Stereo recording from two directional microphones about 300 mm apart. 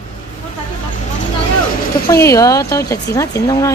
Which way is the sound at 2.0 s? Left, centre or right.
Centre.